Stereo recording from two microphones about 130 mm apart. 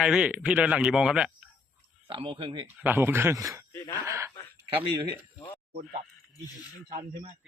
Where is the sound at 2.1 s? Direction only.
40° right (ahead or behind).